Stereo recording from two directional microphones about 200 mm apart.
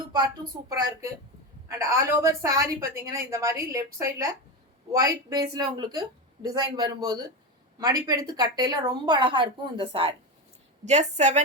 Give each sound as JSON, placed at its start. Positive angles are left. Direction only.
{"t": 0.5, "sound": "a woman's voice", "side_deg": -20}